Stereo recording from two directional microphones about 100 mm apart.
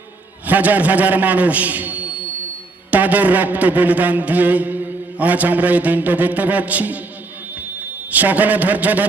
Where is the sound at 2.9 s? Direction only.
15° right (ahead or behind).